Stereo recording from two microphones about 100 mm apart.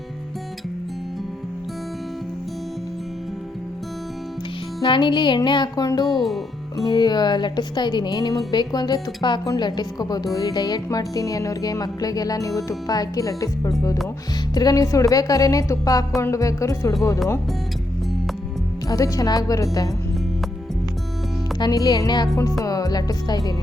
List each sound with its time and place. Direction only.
4.8 s a woman's voice: 50° left (ahead or behind); by 16.9 s 35° left (ahead or behind)
18.9 s a woman's voice: 35° left (ahead or behind)
21.6 s a woman's voice: 45° left (ahead or behind)